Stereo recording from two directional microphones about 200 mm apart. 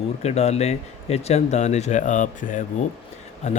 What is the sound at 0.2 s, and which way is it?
Speech, 35° left (ahead or behind).